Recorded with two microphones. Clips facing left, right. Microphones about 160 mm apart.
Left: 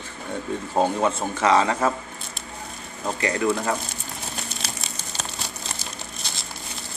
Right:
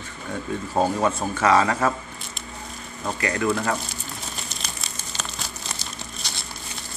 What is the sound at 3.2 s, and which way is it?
Speech, 25° left (ahead or behind).